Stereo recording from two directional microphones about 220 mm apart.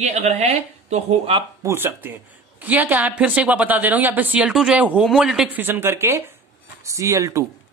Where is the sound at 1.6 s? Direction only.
10° right (ahead or behind).